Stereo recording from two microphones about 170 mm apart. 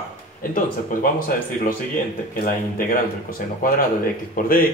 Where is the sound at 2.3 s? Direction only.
55° left (ahead or behind).